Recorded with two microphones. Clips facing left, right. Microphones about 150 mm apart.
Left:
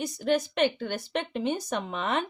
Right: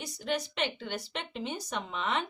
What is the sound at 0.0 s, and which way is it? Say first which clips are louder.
A woman's voice: left 7 dB; 50° left (ahead or behind).